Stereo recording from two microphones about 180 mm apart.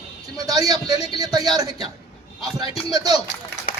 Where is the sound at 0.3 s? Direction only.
20° right (ahead or behind).